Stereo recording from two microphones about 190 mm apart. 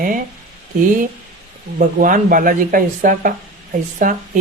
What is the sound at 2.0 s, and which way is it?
Speech, 45° right (ahead or behind).